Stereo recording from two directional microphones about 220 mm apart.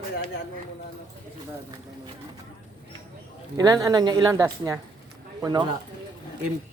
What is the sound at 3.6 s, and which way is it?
Speech, 15° right (ahead or behind).